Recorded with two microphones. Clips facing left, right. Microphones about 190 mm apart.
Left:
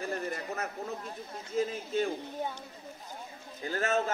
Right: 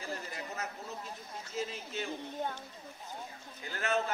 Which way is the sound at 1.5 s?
50° left (ahead or behind).